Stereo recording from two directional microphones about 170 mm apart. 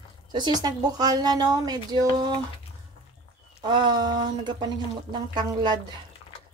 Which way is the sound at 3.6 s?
25° right (ahead or behind).